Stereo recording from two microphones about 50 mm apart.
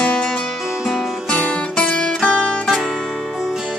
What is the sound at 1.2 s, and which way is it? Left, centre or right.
Music, left.